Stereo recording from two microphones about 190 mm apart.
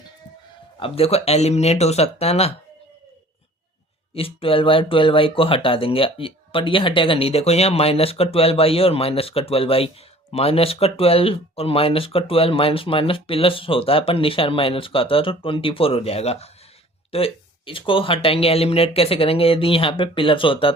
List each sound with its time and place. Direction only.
0.8 s speech: 30° left (ahead or behind)
4.1 s speech: 30° left (ahead or behind)